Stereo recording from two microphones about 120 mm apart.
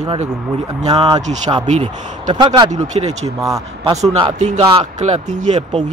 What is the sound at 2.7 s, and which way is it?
Speech, 75° right (ahead or behind).